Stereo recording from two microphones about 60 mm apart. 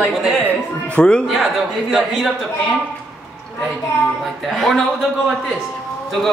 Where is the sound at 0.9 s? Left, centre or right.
Centre.